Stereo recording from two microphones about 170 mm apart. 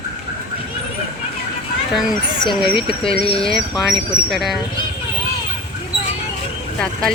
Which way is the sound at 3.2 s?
35° left (ahead or behind).